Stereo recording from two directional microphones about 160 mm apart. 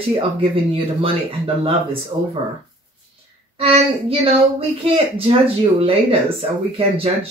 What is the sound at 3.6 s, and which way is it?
Speech, 35° right (ahead or behind).